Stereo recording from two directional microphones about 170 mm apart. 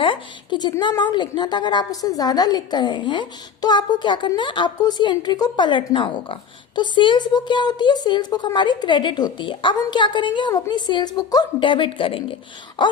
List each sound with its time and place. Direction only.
0.0 s a woman's voice: 30° left (ahead or behind)